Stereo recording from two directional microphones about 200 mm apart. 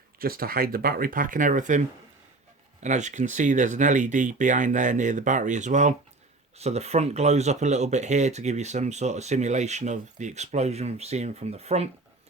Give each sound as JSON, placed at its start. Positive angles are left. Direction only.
{"t": 0.2, "sound": "speech", "side_deg": -45}
{"t": 2.8, "sound": "speech", "side_deg": -35}